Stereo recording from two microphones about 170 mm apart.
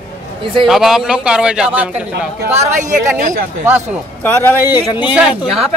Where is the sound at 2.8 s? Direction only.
50° right (ahead or behind).